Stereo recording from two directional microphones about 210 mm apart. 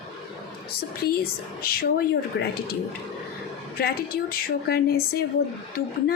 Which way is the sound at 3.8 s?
45° left (ahead or behind).